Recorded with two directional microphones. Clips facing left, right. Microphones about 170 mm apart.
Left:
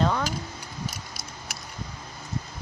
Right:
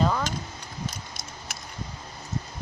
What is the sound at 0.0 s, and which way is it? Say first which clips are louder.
Keys jangling: even; centre (ahead or behind).